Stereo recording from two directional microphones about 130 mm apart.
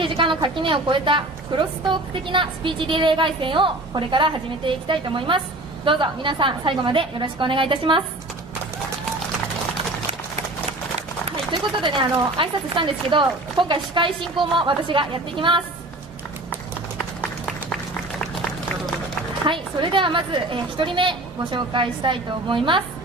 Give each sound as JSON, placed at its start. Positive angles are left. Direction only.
{"t": 0.0, "sound": "a woman's voice", "side_deg": -40}
{"t": 11.8, "sound": "a woman's voice", "side_deg": -40}
{"t": 19.4, "sound": "a woman's voice", "side_deg": -40}